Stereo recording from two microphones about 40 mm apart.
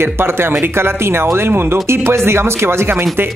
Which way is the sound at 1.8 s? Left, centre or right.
Right.